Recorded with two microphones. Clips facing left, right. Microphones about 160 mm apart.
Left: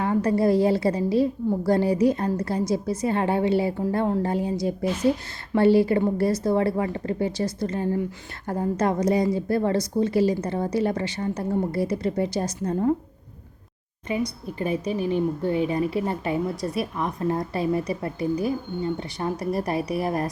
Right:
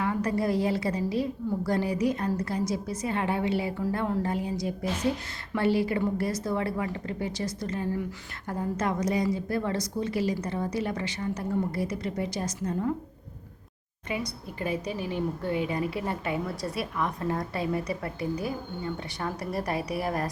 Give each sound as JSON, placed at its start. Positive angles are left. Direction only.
{"t": 0.0, "sound": "a woman's voice", "side_deg": 30}
{"t": 14.6, "sound": "a woman's voice", "side_deg": 25}